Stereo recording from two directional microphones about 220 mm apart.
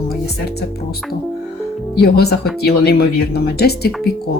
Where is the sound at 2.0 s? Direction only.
45° left (ahead or behind).